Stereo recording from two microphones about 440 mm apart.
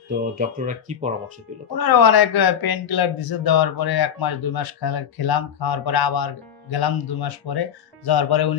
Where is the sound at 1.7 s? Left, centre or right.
Left.